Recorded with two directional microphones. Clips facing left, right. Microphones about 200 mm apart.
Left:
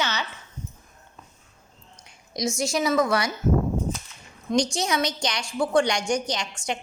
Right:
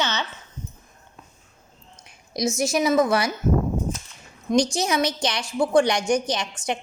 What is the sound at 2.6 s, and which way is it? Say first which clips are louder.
Speech: right 3 dB; 20° right (ahead or behind).